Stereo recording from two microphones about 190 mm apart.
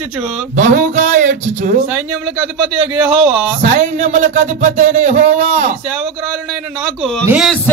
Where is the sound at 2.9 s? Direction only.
10° right (ahead or behind).